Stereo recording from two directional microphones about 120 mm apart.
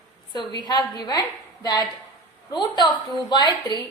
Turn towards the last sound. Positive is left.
turn(degrees=35)  # may be behind; listen again after turning